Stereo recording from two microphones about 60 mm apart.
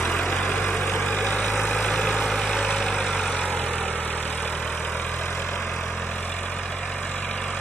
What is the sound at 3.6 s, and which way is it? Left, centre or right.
Vehicle, left.